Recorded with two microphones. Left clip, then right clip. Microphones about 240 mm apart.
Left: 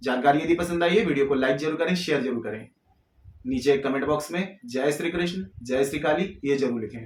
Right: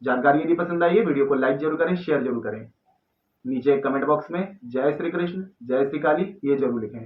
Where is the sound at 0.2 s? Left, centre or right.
Left.